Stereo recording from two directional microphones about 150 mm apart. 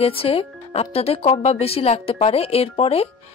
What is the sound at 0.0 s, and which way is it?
Speech, 40° left (ahead or behind).